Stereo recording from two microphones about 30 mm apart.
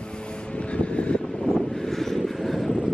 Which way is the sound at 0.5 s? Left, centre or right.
Left.